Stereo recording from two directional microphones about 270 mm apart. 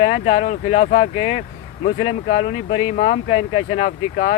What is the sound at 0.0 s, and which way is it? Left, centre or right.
Speech, left.